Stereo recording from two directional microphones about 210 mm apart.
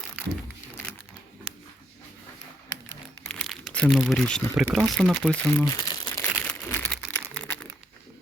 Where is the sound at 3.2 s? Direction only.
5° left (ahead or behind).